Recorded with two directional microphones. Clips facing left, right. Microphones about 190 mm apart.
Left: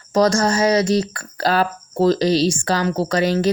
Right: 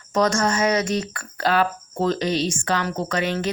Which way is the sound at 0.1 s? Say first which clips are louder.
Left 4 dB; 35° left (ahead or behind).